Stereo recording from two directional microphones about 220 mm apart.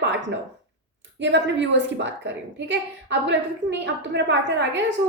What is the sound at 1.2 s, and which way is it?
A woman's voice, 55° right (ahead or behind).